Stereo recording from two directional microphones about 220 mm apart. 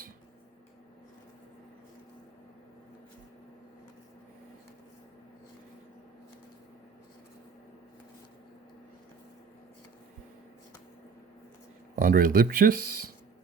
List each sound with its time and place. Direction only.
11.9 s speech: 40° right (ahead or behind)